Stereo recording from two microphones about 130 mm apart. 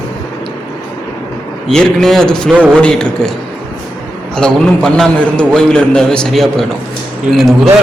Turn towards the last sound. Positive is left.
turn(degrees=0)  # may be behind; listen again after turning